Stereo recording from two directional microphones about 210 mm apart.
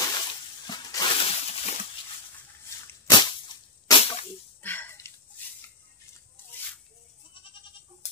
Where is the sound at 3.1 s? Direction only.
20° left (ahead or behind).